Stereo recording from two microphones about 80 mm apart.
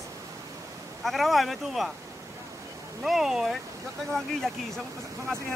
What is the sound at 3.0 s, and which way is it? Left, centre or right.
Speech, centre.